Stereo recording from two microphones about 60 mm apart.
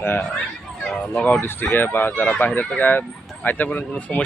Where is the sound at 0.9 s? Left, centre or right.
Left.